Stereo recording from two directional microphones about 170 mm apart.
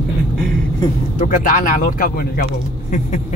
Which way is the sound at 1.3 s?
55° left (ahead or behind).